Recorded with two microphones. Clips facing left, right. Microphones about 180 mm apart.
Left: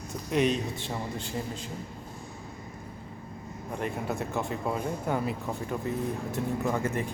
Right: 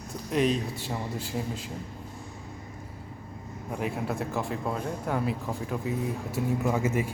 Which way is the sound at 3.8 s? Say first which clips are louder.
Right 1 dB; centre (ahead or behind).